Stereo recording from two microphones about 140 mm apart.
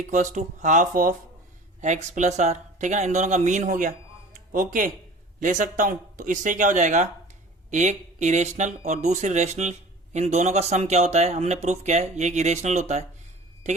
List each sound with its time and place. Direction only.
0.1 s speech: 60° right (ahead or behind); by 4.9 s 75° right (ahead or behind)
5.4 s speech: 65° right (ahead or behind)